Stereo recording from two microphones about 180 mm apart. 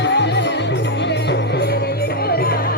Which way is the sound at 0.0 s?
75° left (ahead or behind).